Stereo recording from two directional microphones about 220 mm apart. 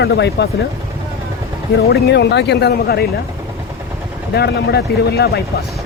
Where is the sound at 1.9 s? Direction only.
50° left (ahead or behind).